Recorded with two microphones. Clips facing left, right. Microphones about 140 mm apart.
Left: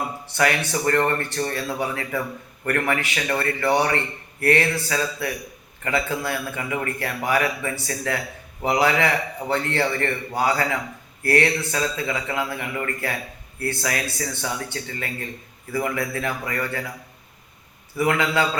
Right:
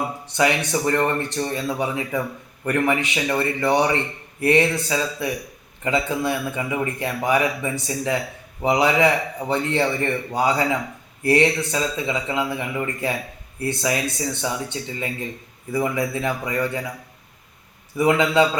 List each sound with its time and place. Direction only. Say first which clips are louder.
0.3 s a man's voice: right 2 dB; 20° right (ahead or behind)
17.9 s speech: right 4 dB; 20° right (ahead or behind)